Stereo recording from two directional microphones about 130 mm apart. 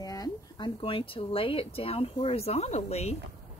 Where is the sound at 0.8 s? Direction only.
45° left (ahead or behind).